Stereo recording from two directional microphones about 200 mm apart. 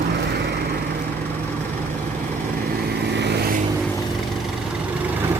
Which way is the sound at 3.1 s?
60° right (ahead or behind).